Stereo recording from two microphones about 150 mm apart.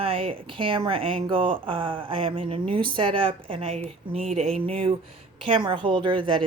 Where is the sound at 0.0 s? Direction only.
40° right (ahead or behind).